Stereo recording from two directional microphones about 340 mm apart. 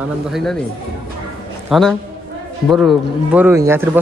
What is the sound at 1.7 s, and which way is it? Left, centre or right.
Speech, centre.